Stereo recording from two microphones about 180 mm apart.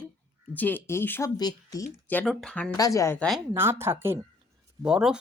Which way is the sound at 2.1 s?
5° left (ahead or behind).